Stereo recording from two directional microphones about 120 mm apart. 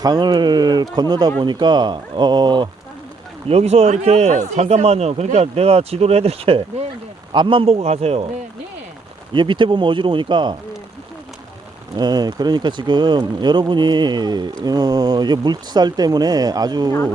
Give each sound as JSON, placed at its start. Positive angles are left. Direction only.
{"t": 0.0, "sound": "speech", "side_deg": -35}
{"t": 3.5, "sound": "speech", "side_deg": -60}
{"t": 4.6, "sound": "speech", "side_deg": -60}
{"t": 7.3, "sound": "speech", "side_deg": -45}
{"t": 9.3, "sound": "speech", "side_deg": -40}
{"t": 11.9, "sound": "speech", "side_deg": -35}